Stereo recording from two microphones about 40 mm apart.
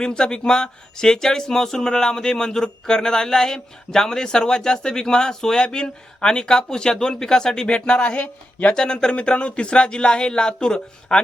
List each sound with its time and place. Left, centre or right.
0.0 s speech: left
8.7 s speech: centre